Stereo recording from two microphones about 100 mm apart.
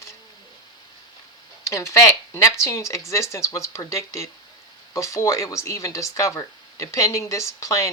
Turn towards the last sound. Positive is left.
turn(degrees=30)  # may be behind; listen again after turning